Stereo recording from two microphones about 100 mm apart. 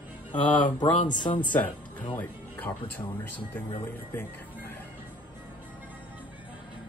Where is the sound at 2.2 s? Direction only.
15° left (ahead or behind).